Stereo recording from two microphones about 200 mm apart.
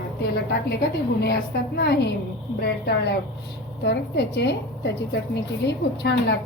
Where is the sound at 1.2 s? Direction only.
55° left (ahead or behind).